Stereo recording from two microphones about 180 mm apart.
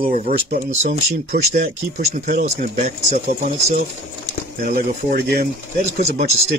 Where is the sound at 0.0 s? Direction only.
50° right (ahead or behind).